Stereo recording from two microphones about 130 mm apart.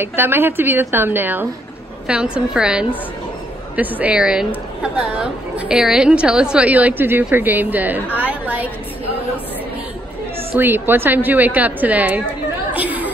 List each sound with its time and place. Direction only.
0.0 s a woman's voice: 15° right (ahead or behind)
10.5 s a woman's voice: 15° right (ahead or behind)
12.7 s chatter: 10° right (ahead or behind)